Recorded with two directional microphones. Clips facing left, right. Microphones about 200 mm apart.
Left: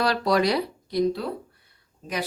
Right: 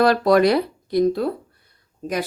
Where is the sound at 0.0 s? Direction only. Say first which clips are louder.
Right 7 dB; 50° right (ahead or behind).